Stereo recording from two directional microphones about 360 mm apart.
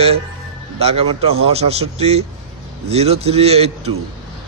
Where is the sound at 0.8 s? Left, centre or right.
Centre.